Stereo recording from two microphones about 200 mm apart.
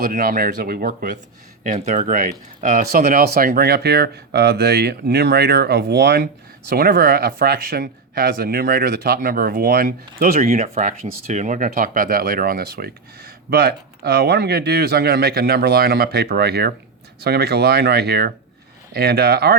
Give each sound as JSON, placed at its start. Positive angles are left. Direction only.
{"t": 0.0, "sound": "speech", "side_deg": -45}